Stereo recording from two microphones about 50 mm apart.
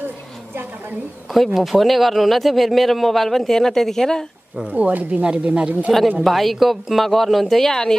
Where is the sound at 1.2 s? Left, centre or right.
Centre.